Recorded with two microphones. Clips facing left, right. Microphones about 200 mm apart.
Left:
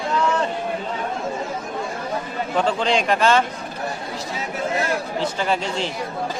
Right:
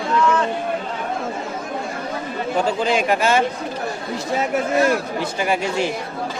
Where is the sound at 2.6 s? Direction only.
5° right (ahead or behind).